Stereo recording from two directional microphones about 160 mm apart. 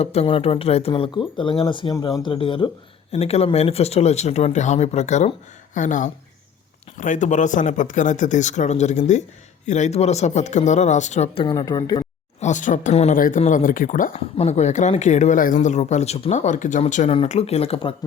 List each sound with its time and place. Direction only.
0.0 s speech: 40° left (ahead or behind)
11.4 s speech: 25° left (ahead or behind)
12.4 s speech: 50° left (ahead or behind)
13.1 s speech: 60° left (ahead or behind)
14.1 s speech: 40° left (ahead or behind)
17.1 s speech: 40° left (ahead or behind)